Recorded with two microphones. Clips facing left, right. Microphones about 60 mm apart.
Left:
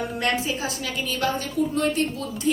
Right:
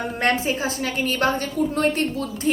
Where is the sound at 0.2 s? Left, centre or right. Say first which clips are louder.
Right 5 dB; right.